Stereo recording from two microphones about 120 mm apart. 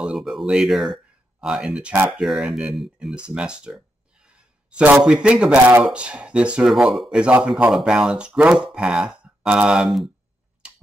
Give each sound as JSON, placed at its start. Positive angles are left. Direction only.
{"t": 0.0, "sound": "speech", "side_deg": -5}